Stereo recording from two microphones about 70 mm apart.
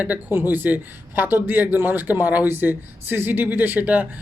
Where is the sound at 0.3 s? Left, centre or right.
Right.